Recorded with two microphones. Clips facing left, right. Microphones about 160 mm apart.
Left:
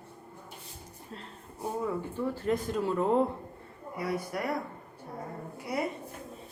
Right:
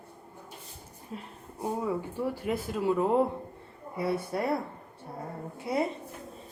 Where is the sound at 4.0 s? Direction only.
25° right (ahead or behind).